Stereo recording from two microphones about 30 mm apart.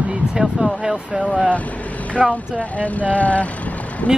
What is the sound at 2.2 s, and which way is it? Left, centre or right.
Speech, right.